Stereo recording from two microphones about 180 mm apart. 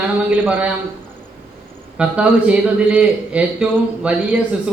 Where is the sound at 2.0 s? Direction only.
5° right (ahead or behind).